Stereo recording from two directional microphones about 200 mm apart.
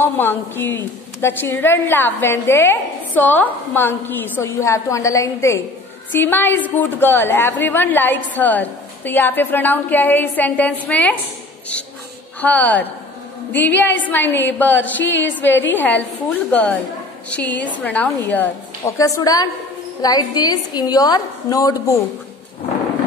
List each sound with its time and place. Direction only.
0.0 s a woman's voice: 10° left (ahead or behind)
12.4 s a woman's voice: 10° left (ahead or behind)